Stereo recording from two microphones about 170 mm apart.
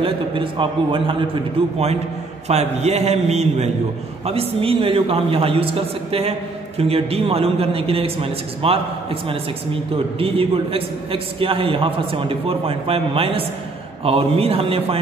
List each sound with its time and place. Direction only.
0.0 s a man's voice: 30° right (ahead or behind)